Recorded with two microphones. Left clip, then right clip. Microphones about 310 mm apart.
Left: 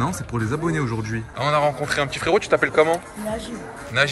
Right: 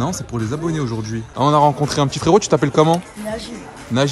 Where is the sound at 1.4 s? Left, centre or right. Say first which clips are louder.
Right 6 dB; centre.